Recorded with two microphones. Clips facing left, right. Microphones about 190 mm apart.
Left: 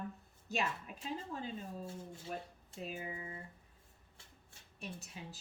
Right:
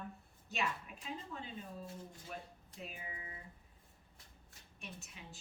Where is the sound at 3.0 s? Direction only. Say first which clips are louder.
Left 6 dB; 25° left (ahead or behind).